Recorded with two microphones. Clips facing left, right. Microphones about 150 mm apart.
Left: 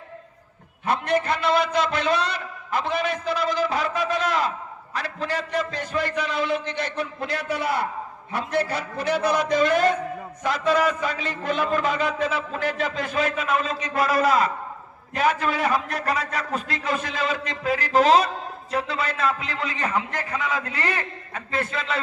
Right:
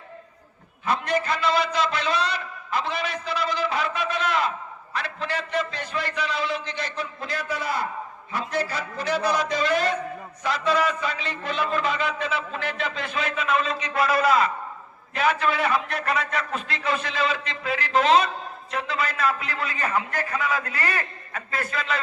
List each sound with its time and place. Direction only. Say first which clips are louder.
0.9 s a man's voice: left 2 dB; 60° left (ahead or behind); by 22.0 s 25° left (ahead or behind)